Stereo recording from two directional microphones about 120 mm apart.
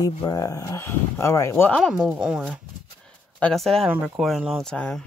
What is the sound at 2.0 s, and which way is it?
Speech, 5° right (ahead or behind).